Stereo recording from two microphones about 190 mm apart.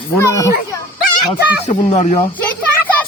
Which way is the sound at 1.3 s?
30° left (ahead or behind).